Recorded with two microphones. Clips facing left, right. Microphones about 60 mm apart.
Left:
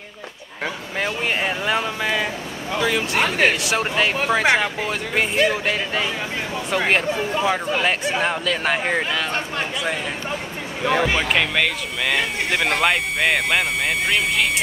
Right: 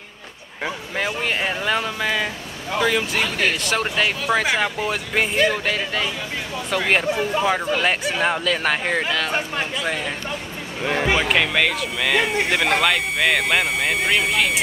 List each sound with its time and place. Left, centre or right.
0.9 s speech: centre
3.2 s speech: left
3.6 s speech: centre
10.8 s speech: centre